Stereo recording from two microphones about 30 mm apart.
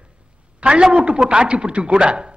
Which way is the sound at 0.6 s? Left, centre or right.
Right.